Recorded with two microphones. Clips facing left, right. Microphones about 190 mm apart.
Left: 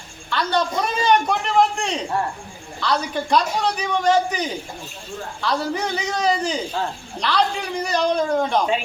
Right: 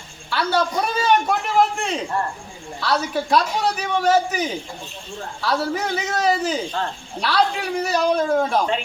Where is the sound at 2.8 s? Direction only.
5° right (ahead or behind).